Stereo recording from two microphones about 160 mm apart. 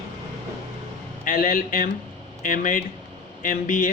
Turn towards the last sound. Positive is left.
turn(degrees=55)  # may be behind; listen again after turning